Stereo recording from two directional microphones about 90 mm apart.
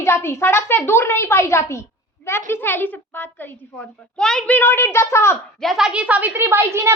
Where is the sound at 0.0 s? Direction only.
30° left (ahead or behind).